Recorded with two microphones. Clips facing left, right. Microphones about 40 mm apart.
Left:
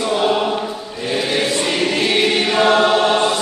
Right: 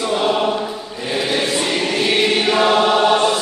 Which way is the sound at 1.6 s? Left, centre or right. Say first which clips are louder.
Left 1 dB; centre.